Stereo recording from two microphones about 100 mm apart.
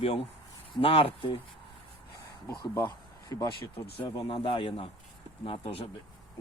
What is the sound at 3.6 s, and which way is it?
Speech, 60° left (ahead or behind).